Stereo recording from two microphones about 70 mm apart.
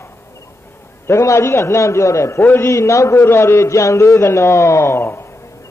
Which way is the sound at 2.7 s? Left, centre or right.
Left.